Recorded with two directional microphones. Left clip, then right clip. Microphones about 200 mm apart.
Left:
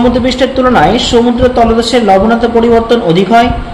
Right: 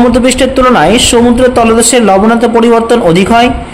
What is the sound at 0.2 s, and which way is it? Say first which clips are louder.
A man's voice: right 3 dB; 35° right (ahead or behind).